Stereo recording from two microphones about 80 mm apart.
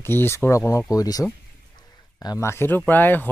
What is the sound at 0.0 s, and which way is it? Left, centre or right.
Speech, left.